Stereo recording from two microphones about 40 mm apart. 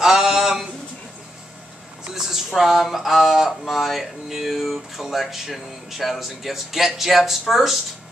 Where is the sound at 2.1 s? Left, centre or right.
Centre.